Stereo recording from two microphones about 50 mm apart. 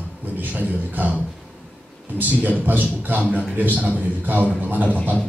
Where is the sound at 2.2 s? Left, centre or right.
Right.